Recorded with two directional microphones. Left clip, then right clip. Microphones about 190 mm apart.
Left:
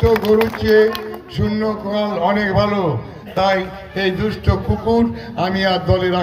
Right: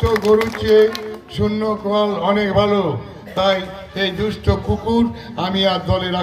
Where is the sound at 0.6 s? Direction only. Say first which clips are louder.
Even; 45° right (ahead or behind).